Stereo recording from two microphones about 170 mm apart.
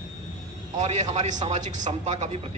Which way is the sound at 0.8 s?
40° right (ahead or behind).